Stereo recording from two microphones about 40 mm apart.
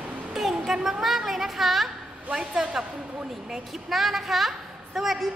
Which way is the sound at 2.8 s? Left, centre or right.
Centre.